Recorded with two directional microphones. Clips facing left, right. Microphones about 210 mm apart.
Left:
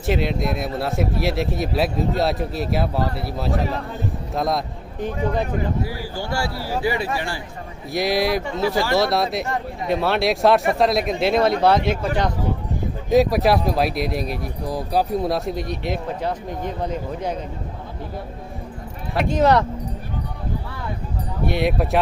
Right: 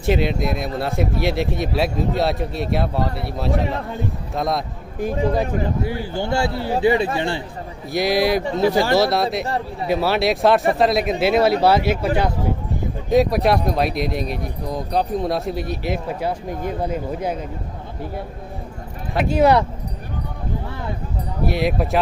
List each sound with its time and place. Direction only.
0.0 s speech: centre (ahead or behind)
5.8 s speech: 25° right (ahead or behind)
7.9 s speech: centre (ahead or behind)
8.7 s speech: 25° right (ahead or behind)
9.0 s speech: centre (ahead or behind)
19.1 s speech: 5° right (ahead or behind)
21.4 s speech: centre (ahead or behind)